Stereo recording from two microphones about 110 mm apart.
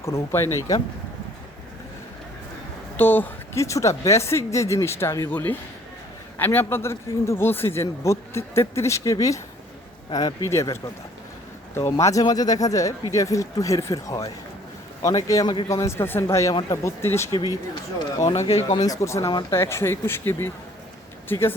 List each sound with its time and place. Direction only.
0.0 s a man's voice: 25° left (ahead or behind)
3.0 s a man's voice: 20° left (ahead or behind)
17.3 s speech: 40° left (ahead or behind)
18.3 s speech: 75° left (ahead or behind)
18.9 s a man's voice: 25° left (ahead or behind)